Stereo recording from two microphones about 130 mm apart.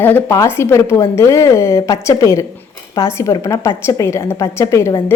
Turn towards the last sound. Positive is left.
turn(degrees=20)  # may be behind; listen again after turning